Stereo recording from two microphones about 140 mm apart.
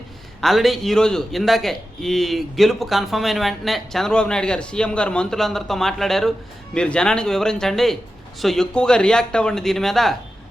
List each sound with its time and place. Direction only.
0.4 s a man's voice: centre (ahead or behind)